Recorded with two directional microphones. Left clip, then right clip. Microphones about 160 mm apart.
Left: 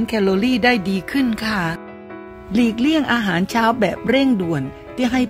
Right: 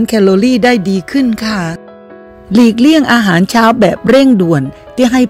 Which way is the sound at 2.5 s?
40° right (ahead or behind).